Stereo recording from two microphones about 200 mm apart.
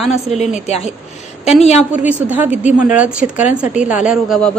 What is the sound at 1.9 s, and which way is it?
A woman's voice, 5° right (ahead or behind).